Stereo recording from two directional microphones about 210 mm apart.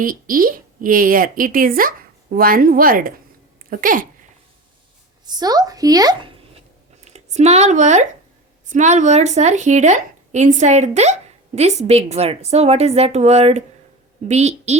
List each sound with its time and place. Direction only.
0.0 s speech: 40° right (ahead or behind)
5.2 s a woman's voice: 20° right (ahead or behind)
7.0 s speech: 30° right (ahead or behind)